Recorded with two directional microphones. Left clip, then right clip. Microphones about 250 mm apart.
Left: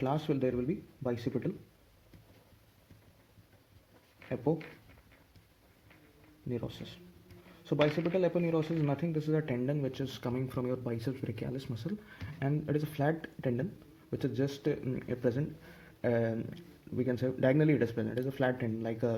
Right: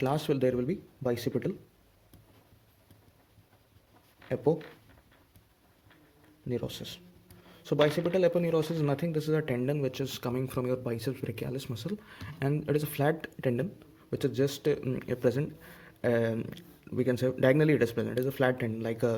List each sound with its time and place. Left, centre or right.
0.0 s speech: right
6.5 s speech: right